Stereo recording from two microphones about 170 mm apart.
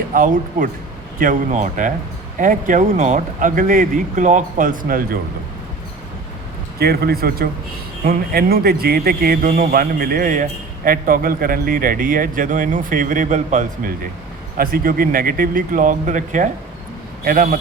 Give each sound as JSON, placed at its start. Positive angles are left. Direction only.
{"t": 0.1, "sound": "speech", "side_deg": -50}
{"t": 6.7, "sound": "a man's voice", "side_deg": -65}
{"t": 14.6, "sound": "a man's voice", "side_deg": -60}